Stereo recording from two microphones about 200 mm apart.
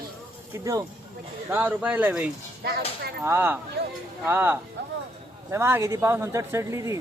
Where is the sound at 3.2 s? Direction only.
10° right (ahead or behind).